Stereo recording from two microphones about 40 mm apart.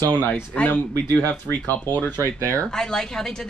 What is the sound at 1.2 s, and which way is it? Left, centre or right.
Speech, left.